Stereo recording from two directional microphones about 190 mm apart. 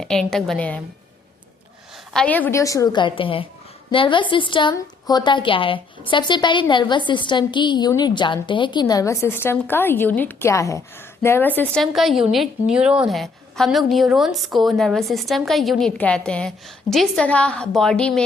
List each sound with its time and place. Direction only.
0.0 s a woman's voice: 5° left (ahead or behind)
2.1 s a woman's voice: 10° left (ahead or behind)